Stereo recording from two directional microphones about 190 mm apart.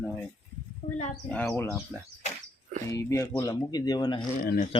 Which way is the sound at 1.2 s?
5° left (ahead or behind).